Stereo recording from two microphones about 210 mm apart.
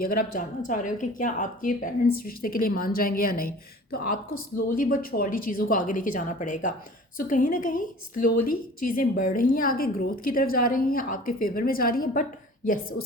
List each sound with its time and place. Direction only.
0.0 s a woman's voice: 40° left (ahead or behind)